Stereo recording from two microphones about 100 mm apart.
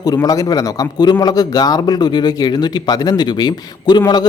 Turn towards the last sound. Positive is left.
turn(degrees=45)  # may be behind; listen again after turning